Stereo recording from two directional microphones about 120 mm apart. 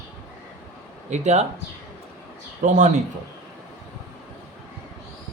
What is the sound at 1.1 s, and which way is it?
Speech, 70° right (ahead or behind).